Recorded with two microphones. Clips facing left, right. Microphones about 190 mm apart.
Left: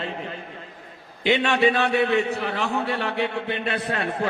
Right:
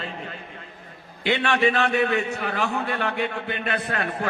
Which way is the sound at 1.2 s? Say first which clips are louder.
Left 2 dB; 15° left (ahead or behind).